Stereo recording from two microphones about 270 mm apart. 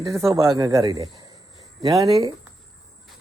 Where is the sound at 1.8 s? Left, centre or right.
Centre.